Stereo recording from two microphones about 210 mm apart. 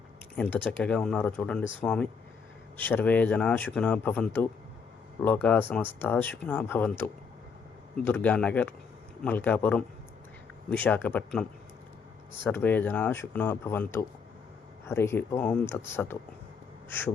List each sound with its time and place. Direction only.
0.3 s speech: 5° left (ahead or behind)